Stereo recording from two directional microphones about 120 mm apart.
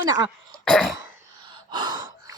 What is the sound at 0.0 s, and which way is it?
Throat clearing, 35° right (ahead or behind).